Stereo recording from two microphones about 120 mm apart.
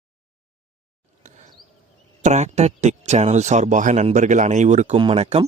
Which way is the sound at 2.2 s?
75° right (ahead or behind).